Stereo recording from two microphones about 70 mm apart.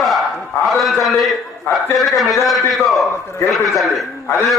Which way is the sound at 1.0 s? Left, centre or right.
Centre.